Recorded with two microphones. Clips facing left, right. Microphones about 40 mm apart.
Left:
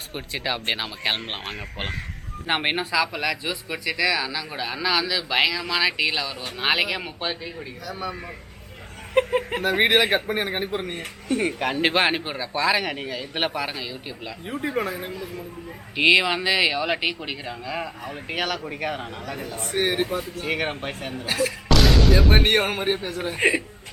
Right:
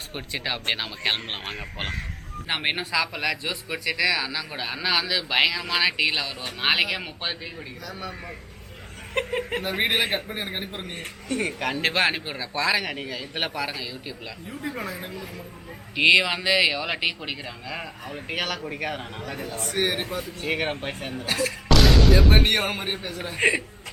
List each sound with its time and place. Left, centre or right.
0.1 s speech: centre
9.1 s speech: centre
9.8 s a man's voice: left
10.9 s speech: centre
14.4 s speech: left
16.0 s speech: centre
19.5 s speech: centre
19.8 s speech: centre
21.1 s a sound: centre
22.4 s speech: left
23.4 s speech: centre